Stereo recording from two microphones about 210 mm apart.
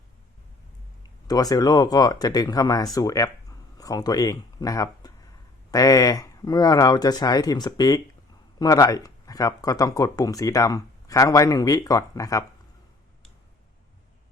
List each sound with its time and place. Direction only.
1.3 s speech: 15° left (ahead or behind)